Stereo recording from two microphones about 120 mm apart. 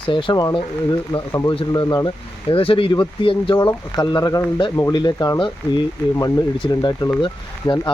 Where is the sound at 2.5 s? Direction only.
50° left (ahead or behind).